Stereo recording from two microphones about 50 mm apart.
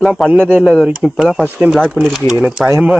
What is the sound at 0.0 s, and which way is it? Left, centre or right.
Speech, centre.